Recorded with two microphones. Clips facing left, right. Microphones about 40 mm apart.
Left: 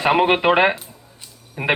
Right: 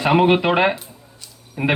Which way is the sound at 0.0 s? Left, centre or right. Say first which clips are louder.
Right 1 dB; centre.